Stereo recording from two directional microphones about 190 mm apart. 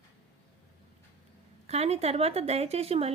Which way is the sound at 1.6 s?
35° right (ahead or behind).